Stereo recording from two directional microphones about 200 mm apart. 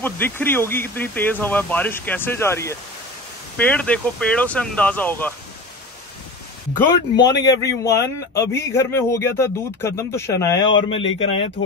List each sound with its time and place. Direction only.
0.0 s a man's voice: 10° left (ahead or behind)
7.2 s a man's voice: 20° left (ahead or behind)